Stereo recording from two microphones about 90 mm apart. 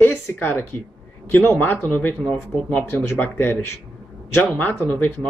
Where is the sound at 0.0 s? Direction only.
25° left (ahead or behind).